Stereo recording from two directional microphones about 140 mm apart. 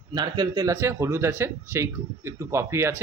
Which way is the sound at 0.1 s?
30° right (ahead or behind).